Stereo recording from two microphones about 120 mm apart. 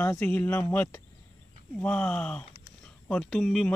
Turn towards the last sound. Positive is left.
turn(degrees=5)  # may be behind; listen again after turning